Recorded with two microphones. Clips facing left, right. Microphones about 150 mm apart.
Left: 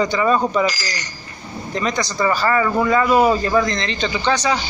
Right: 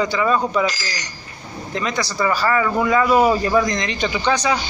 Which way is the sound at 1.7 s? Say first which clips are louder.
Left 1 dB; 5° right (ahead or behind).